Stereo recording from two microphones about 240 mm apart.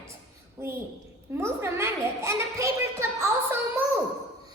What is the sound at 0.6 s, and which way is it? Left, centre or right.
A woman's voice, centre.